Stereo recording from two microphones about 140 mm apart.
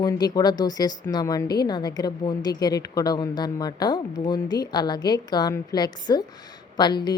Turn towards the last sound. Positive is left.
turn(degrees=30)  # may be behind; listen again after turning